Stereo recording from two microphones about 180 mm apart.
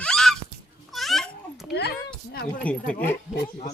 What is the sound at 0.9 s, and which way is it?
Babbling, centre (ahead or behind).